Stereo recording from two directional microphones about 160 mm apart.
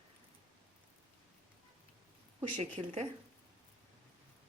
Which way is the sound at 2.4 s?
45° right (ahead or behind).